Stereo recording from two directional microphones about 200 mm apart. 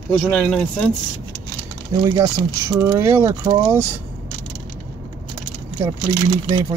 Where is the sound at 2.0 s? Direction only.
20° right (ahead or behind).